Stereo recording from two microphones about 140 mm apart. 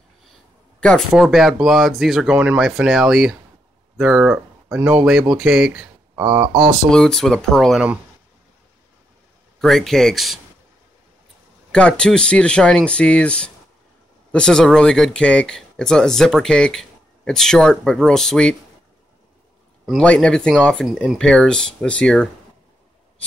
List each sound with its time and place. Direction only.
0.7 s speech: 5° left (ahead or behind)
6.1 s speech: 20° right (ahead or behind)
6.4 s speech: 30° right (ahead or behind)
6.9 s speech: 5° left (ahead or behind)
9.6 s speech: centre (ahead or behind)
11.7 s speech: 5° left (ahead or behind)
19.9 s speech: 5° left (ahead or behind)